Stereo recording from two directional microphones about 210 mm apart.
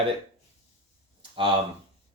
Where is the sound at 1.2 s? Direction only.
25° right (ahead or behind).